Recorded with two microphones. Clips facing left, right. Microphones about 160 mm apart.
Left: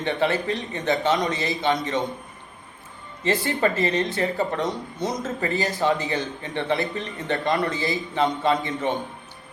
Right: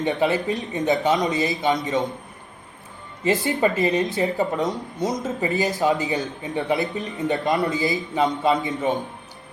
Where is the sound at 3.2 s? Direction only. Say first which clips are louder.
Right 2 dB; 20° right (ahead or behind).